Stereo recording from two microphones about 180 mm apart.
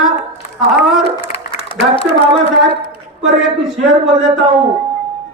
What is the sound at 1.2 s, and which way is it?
Applause, 30° left (ahead or behind).